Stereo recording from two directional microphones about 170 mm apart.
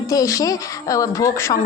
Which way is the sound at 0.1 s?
20° left (ahead or behind).